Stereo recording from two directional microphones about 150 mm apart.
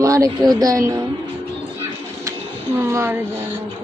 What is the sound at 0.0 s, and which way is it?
Speech, 20° right (ahead or behind).